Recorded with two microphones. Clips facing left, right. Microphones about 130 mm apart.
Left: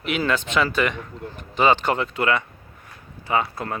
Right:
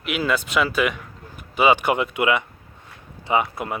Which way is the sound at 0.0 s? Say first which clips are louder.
Even; 5° right (ahead or behind).